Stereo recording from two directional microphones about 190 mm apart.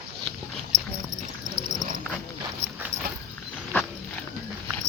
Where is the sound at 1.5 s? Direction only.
20° right (ahead or behind).